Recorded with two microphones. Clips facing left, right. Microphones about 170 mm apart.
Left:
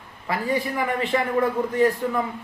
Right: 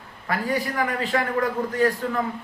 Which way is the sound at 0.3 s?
20° left (ahead or behind).